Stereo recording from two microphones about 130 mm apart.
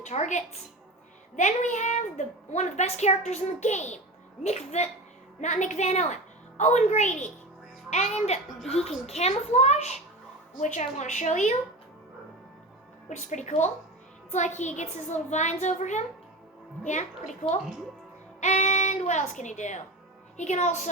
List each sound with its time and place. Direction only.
0.0 s a woman's voice: 65° left (ahead or behind)
5.4 s a woman's voice: 70° left (ahead or behind)
10.6 s a woman's voice: 70° left (ahead or behind)
13.1 s a woman's voice: 65° left (ahead or behind)
18.3 s a woman's voice: 65° left (ahead or behind)